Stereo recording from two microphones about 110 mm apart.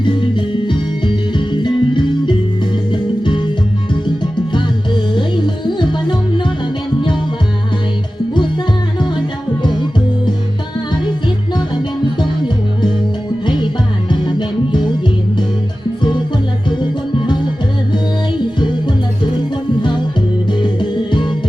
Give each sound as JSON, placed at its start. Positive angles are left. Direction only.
{"t": 0.0, "sound": "music", "side_deg": 50}
{"t": 5.6, "sound": "music", "side_deg": 45}
{"t": 14.1, "sound": "music", "side_deg": 45}
{"t": 16.6, "sound": "music", "side_deg": 45}
{"t": 19.8, "sound": "music", "side_deg": 45}